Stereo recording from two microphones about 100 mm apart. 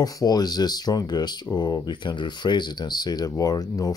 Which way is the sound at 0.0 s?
40° left (ahead or behind).